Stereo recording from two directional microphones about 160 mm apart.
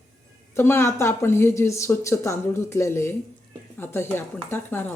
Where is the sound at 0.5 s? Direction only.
15° left (ahead or behind).